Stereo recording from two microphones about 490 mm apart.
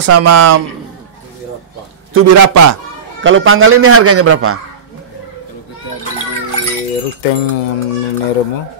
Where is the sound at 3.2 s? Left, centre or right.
Right.